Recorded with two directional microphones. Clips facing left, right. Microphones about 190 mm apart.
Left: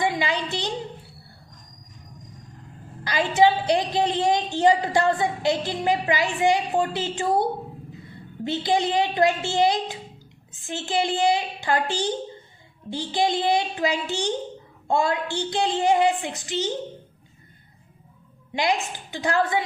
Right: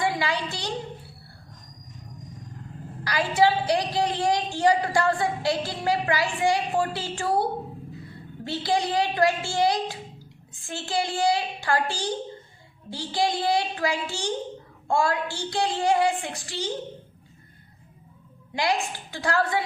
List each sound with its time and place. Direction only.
0.0 s a woman's voice: 20° left (ahead or behind)
3.0 s a woman's voice: 20° left (ahead or behind)
8.4 s a woman's voice: 20° left (ahead or behind)
18.5 s a woman's voice: 20° left (ahead or behind)